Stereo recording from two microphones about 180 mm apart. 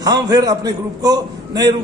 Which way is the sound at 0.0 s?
20° right (ahead or behind).